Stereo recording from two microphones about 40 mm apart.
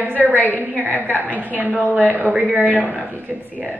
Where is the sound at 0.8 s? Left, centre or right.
Right.